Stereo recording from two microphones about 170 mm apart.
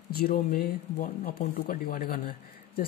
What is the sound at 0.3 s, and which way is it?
Speech, 50° left (ahead or behind).